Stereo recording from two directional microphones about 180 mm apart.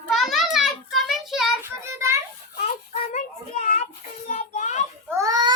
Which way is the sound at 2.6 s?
45° left (ahead or behind).